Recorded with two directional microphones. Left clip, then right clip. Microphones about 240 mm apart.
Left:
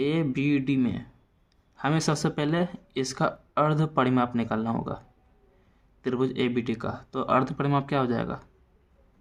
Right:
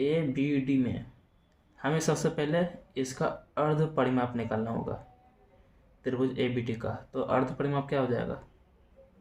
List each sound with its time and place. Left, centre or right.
0.0 s speech: left
6.0 s speech: left